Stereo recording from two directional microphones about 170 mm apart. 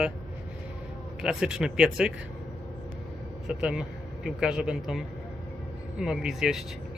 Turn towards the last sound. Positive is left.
turn(degrees=-5)  # may be behind; listen again after turning